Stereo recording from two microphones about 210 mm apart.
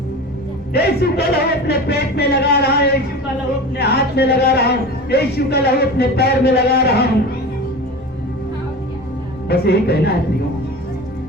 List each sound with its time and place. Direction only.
0.7 s a man's voice: 50° left (ahead or behind)
9.5 s a man's voice: 50° left (ahead or behind)